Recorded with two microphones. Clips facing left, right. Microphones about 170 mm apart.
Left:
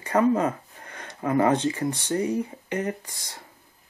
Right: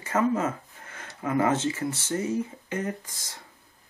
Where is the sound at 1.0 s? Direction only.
35° left (ahead or behind).